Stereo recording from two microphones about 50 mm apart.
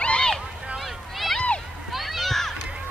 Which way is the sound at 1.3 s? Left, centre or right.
Left.